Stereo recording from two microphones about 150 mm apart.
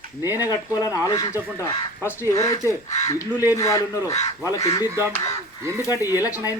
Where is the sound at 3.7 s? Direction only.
20° left (ahead or behind).